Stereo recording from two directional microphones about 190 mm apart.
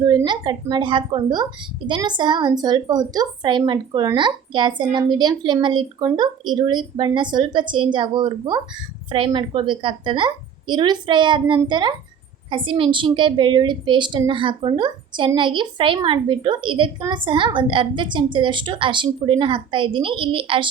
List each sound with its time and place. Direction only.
0.0 s a woman's voice: 20° right (ahead or behind)